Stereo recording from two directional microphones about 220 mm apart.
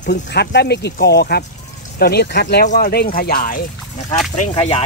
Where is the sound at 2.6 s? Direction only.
40° left (ahead or behind).